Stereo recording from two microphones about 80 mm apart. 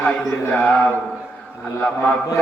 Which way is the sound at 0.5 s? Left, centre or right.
Centre.